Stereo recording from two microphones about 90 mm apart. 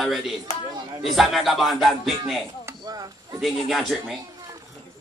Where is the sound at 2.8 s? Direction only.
50° right (ahead or behind).